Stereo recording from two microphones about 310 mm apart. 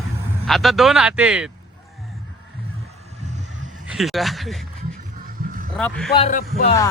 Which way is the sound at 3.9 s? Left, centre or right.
Centre.